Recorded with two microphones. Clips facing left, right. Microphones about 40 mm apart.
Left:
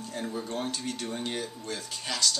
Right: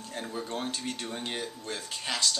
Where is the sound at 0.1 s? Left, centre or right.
Centre.